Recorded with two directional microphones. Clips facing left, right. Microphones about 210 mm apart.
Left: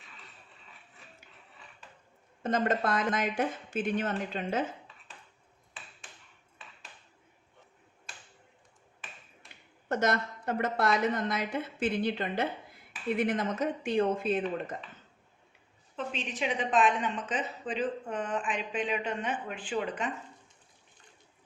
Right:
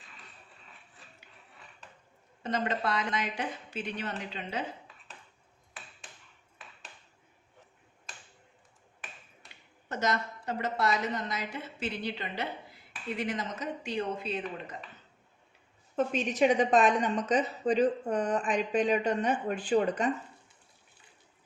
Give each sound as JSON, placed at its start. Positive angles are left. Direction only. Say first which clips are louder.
{"t": 2.4, "sound": "a woman's voice", "louder": "left 3 dB", "side_deg": 50}
{"t": 9.9, "sound": "a woman's voice", "louder": "left 3 dB", "side_deg": 55}
{"t": 16.0, "sound": "a woman's voice", "louder": "right 8 dB", "side_deg": -45}